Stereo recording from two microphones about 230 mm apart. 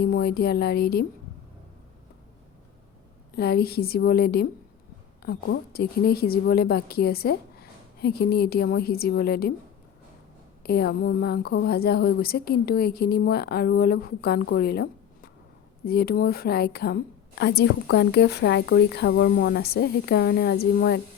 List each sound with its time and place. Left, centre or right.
0.0 s a woman's voice: left
3.3 s a woman's voice: left
10.6 s a woman's voice: left